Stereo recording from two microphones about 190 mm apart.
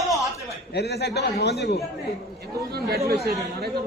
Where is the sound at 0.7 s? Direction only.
60° left (ahead or behind).